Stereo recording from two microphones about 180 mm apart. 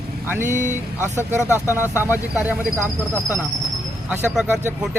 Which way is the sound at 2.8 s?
15° left (ahead or behind).